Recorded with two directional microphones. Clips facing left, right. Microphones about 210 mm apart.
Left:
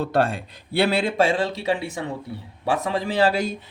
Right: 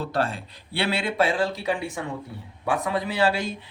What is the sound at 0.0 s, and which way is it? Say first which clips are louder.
A man's voice: left 5 dB; 55° left (ahead or behind).